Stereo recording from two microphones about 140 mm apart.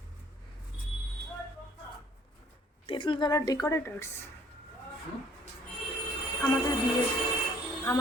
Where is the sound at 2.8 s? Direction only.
35° left (ahead or behind); by 4.2 s 20° left (ahead or behind).